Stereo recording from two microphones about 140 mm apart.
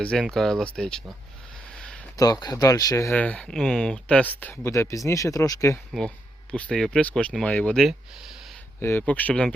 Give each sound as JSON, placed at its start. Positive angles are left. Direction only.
{"t": 0.0, "sound": "speech", "side_deg": 5}
{"t": 1.7, "sound": "a sound", "side_deg": 5}
{"t": 2.1, "sound": "speech", "side_deg": 30}
{"t": 3.2, "sound": "speech", "side_deg": 10}
{"t": 6.5, "sound": "speech", "side_deg": 5}
{"t": 8.8, "sound": "speech", "side_deg": 15}